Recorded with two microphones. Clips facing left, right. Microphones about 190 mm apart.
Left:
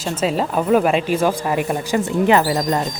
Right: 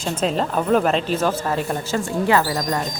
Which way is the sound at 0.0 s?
5° left (ahead or behind).